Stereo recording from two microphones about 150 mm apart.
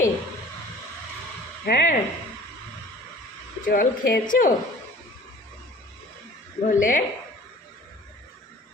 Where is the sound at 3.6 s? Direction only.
65° left (ahead or behind).